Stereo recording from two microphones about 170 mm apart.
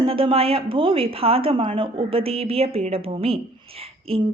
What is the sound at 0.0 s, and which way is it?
Speech, 30° right (ahead or behind).